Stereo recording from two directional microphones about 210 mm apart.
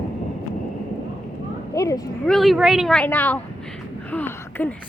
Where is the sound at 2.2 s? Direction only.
Centre (ahead or behind).